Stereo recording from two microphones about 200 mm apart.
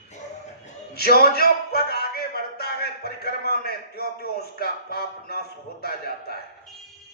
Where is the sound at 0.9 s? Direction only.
50° left (ahead or behind).